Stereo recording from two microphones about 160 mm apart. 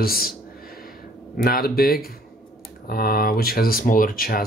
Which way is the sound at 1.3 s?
70° left (ahead or behind).